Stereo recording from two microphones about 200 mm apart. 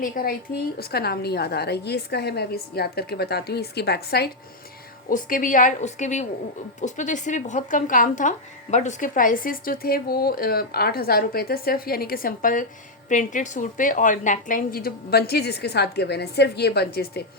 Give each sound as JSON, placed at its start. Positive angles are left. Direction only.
{"t": 0.0, "sound": "speech", "side_deg": 45}
{"t": 5.0, "sound": "a woman's voice", "side_deg": 40}